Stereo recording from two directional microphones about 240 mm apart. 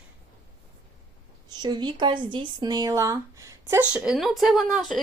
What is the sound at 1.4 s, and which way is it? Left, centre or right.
Speech, centre.